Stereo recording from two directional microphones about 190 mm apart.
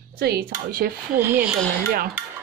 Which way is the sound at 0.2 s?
55° right (ahead or behind).